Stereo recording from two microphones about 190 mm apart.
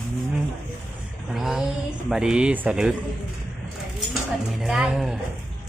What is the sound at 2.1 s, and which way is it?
Speech, 5° right (ahead or behind).